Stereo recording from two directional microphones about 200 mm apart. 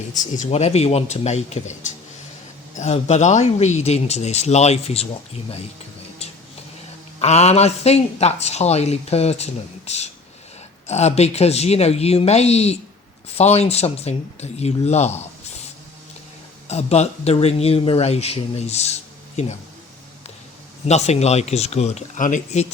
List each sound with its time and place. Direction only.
0.1 s speech: 35° left (ahead or behind)
7.2 s speech: 35° left (ahead or behind)
16.6 s speech: 35° left (ahead or behind)
20.8 s speech: 35° left (ahead or behind)